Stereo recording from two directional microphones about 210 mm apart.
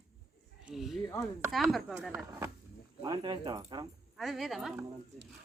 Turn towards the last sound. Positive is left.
turn(degrees=0)  # may be behind; listen again after turning